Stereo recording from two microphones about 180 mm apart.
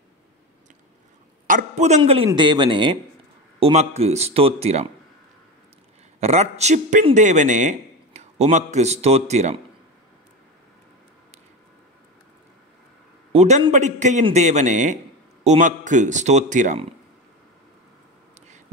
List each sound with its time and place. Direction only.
1.5 s speech: 40° right (ahead or behind)
6.1 s a man's voice: 35° right (ahead or behind)
13.3 s speech: 35° right (ahead or behind)